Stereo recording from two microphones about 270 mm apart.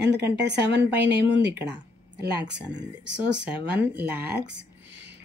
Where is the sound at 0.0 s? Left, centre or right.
Right.